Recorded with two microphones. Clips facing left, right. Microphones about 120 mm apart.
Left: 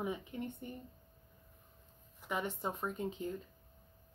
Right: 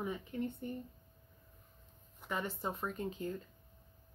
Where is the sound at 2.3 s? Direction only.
15° left (ahead or behind).